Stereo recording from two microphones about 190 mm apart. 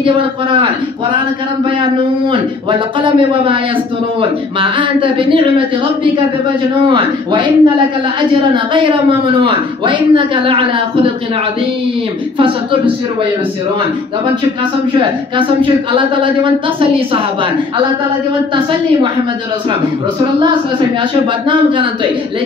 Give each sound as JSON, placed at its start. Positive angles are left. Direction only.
{"t": 0.0, "sound": "speech", "side_deg": -25}
{"t": 3.0, "sound": "speech", "side_deg": -25}
{"t": 6.9, "sound": "speech", "side_deg": -25}
{"t": 9.4, "sound": "speech", "side_deg": -25}
{"t": 15.0, "sound": "speech", "side_deg": -25}